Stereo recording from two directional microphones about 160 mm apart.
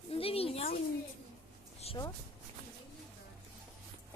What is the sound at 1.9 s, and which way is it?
Speech, 40° left (ahead or behind).